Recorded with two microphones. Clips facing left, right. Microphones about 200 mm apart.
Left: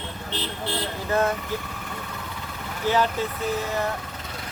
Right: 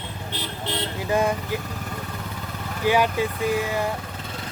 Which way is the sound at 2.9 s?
10° right (ahead or behind).